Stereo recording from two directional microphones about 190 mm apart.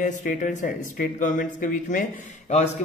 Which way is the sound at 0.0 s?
40° left (ahead or behind).